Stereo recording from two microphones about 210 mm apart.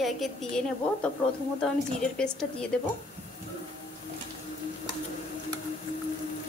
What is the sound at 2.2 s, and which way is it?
Speech, 5° left (ahead or behind).